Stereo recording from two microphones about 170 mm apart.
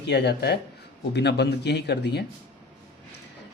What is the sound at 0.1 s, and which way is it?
Speech, 80° left.